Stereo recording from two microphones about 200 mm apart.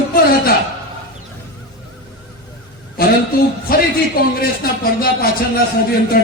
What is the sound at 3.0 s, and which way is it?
Speech, 50° left (ahead or behind).